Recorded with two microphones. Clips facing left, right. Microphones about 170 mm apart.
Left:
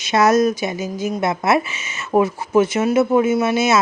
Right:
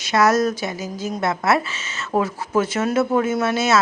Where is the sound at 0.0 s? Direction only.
20° left (ahead or behind).